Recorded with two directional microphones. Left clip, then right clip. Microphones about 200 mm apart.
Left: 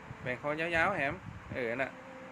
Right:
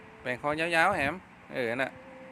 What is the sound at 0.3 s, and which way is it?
Speech, 35° right (ahead or behind).